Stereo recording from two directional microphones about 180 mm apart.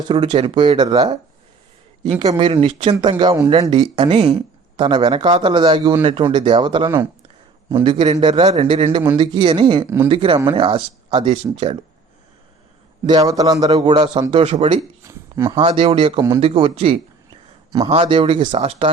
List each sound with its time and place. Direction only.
0.1 s speech: 25° right (ahead or behind)
2.1 s speech: 25° right (ahead or behind)
9.8 s speech: 15° right (ahead or behind)
10.1 s speech: 30° right (ahead or behind)
13.1 s speech: 20° right (ahead or behind)
13.7 s speech: 30° right (ahead or behind)
15.0 s speech: 15° right (ahead or behind)
15.6 s speech: 30° right (ahead or behind)